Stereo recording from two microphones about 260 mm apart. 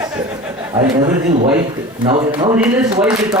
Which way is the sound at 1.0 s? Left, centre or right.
Right.